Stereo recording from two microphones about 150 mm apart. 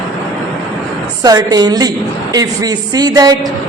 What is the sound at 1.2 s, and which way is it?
A man's voice, 25° right (ahead or behind).